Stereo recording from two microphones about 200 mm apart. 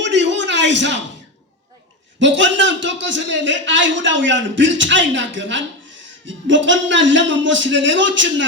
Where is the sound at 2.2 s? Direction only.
65° right (ahead or behind).